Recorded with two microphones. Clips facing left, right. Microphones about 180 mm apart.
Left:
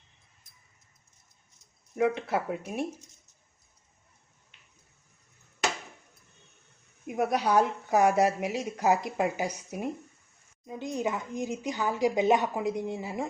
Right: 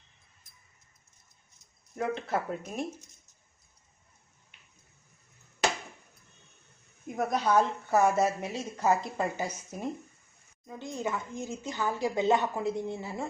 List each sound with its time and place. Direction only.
2.0 s speech: 10° left (ahead or behind)
7.1 s speech: 10° left (ahead or behind)